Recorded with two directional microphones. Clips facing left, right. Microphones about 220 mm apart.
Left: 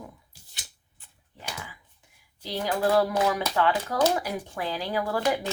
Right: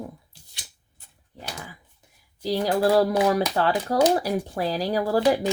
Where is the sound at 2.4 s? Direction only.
40° right (ahead or behind).